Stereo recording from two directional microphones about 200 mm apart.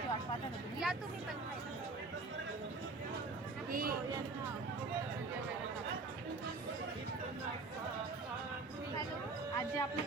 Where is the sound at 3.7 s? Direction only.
45° right (ahead or behind).